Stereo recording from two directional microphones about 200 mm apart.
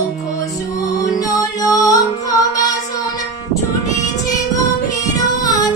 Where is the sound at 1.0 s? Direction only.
20° left (ahead or behind).